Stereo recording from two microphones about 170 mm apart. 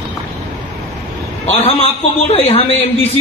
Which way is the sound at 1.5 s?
35° left (ahead or behind).